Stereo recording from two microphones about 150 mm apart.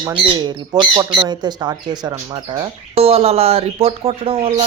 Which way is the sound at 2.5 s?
40° right (ahead or behind).